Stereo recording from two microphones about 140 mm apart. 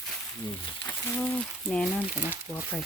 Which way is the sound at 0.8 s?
10° left (ahead or behind).